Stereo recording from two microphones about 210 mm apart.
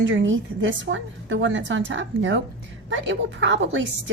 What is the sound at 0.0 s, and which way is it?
A woman's voice, 60° right (ahead or behind).